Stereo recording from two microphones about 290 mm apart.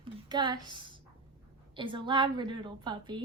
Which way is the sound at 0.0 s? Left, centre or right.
Centre.